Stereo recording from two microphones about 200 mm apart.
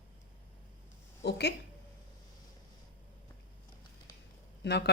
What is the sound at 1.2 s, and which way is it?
Speech, 55° left (ahead or behind).